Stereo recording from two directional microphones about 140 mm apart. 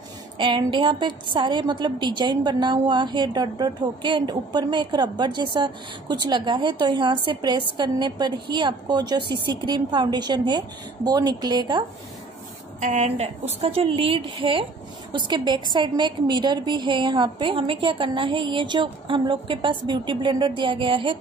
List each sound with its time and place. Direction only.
0.4 s a woman's voice: 35° right (ahead or behind)
12.8 s a woman's voice: 55° right (ahead or behind); by 21.2 s 40° right (ahead or behind)